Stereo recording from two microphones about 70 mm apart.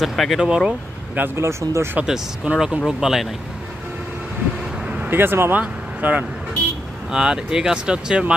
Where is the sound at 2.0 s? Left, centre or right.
Centre.